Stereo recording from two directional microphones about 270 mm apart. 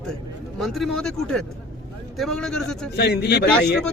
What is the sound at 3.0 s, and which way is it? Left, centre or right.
Speech, left.